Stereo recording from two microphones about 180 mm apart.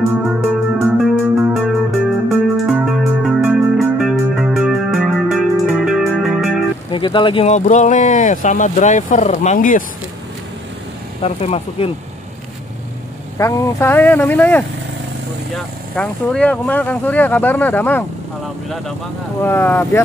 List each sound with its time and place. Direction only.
0.7 s music: 5° right (ahead or behind)
6.9 s speech: 25° left (ahead or behind); by 9.8 s 45° left (ahead or behind)
11.2 s speech: 35° left (ahead or behind)
13.4 s speech: 15° left (ahead or behind)
19.4 s speech: 10° left (ahead or behind)